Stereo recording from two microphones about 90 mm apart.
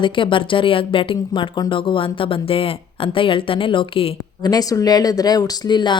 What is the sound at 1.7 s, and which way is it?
Speech, 70° left (ahead or behind).